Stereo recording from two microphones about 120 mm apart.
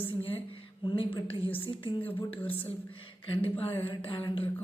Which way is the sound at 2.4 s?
50° left (ahead or behind).